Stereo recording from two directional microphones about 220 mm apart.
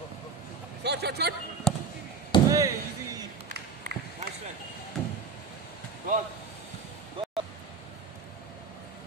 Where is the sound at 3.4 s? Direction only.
35° right (ahead or behind).